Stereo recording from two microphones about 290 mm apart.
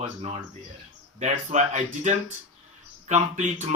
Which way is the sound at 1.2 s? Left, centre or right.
Right.